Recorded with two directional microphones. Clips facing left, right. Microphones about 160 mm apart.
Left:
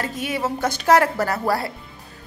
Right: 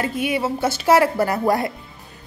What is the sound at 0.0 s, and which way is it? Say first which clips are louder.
A woman's voice: right 3 dB; 10° right (ahead or behind).